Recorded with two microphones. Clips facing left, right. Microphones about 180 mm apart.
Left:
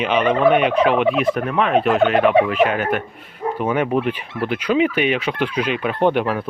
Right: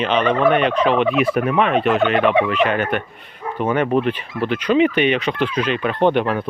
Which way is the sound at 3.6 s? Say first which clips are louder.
Right 2 dB; 10° left (ahead or behind).